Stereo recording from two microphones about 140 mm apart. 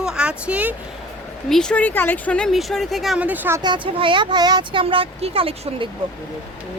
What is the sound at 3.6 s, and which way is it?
Speech, 35° right (ahead or behind).